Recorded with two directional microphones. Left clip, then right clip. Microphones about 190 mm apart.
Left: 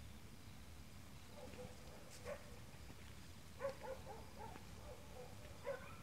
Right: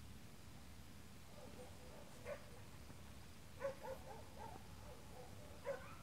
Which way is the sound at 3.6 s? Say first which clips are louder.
Even; 25° left (ahead or behind).